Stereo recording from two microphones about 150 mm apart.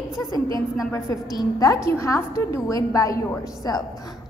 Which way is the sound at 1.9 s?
20° left (ahead or behind).